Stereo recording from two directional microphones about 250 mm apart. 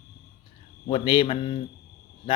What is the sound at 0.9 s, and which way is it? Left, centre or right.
Speech, centre.